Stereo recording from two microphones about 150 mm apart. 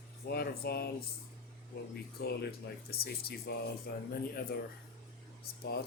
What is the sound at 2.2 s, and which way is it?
Speech, 90° left.